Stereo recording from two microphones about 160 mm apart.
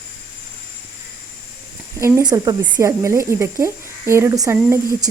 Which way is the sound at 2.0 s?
15° right (ahead or behind).